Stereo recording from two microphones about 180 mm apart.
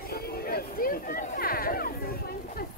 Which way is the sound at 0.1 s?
60° left (ahead or behind).